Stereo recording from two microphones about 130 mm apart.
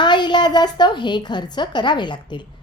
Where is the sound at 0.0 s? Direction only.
35° left (ahead or behind).